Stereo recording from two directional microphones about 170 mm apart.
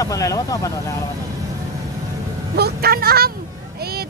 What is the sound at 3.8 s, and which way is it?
Vehicle, 65° right (ahead or behind).